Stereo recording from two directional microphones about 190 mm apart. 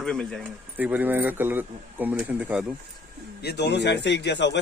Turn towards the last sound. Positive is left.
turn(degrees=65)  # may be behind; listen again after turning